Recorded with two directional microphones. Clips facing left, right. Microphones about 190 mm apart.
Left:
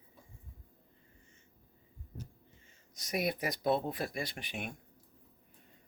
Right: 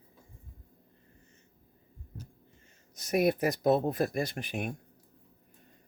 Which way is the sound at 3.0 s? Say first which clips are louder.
Right 8 dB; 50° right (ahead or behind).